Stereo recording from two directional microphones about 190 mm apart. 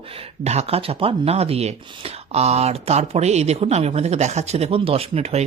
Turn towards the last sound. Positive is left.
turn(degrees=-35)  # may be behind; listen again after turning